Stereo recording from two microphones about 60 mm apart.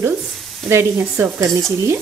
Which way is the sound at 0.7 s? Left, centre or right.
Right.